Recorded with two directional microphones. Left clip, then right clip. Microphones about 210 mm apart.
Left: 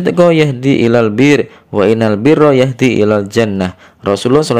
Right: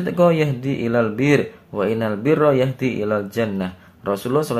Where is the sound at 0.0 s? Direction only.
35° left (ahead or behind).